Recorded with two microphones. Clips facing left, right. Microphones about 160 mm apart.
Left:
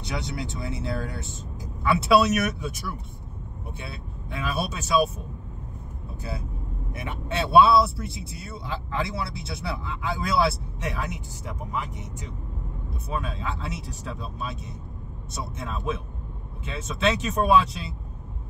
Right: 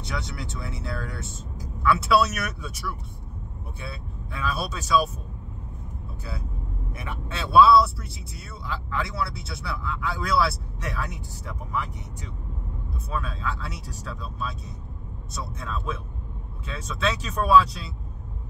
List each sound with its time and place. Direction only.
0.1 s speech: 20° left (ahead or behind)
4.3 s speech: 25° left (ahead or behind)
7.1 s speech: 25° left (ahead or behind)
13.1 s speech: 20° left (ahead or behind)